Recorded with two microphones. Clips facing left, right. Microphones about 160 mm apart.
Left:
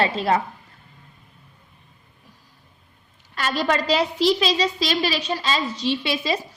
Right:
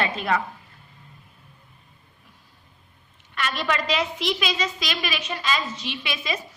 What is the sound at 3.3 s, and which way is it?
A woman's voice, 35° left (ahead or behind).